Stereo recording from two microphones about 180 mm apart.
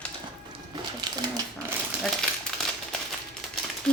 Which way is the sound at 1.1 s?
25° right (ahead or behind).